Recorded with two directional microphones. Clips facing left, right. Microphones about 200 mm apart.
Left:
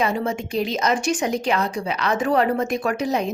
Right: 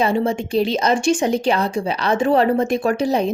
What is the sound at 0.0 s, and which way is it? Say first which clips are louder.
A woman's voice: right 4 dB; 30° right (ahead or behind).